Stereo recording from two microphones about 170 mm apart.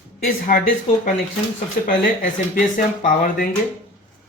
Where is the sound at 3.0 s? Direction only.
55° left (ahead or behind).